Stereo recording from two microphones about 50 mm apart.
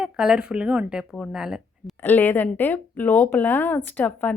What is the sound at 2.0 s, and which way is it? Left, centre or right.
Speech, left.